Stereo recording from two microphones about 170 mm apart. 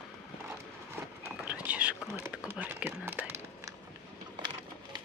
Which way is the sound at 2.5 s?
10° right (ahead or behind).